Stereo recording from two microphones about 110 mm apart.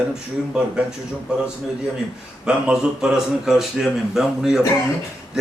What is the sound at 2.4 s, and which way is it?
Speech, 5° right (ahead or behind).